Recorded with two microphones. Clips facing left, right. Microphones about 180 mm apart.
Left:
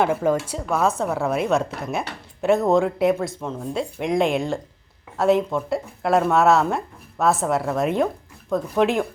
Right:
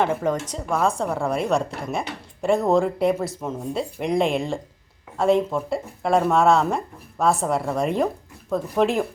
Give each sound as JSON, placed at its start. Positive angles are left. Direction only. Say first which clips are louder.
{"t": 0.0, "sound": "a woman's voice", "louder": "left 2 dB", "side_deg": 5}